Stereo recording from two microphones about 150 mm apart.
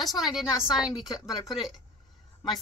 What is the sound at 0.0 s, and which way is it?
Speech, centre (ahead or behind).